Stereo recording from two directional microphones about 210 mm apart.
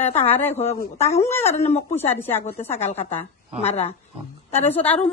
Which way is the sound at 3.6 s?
30° left (ahead or behind).